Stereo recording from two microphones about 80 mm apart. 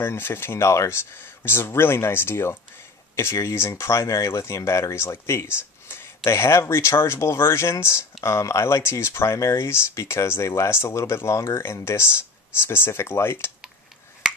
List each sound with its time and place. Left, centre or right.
0.0 s speech: left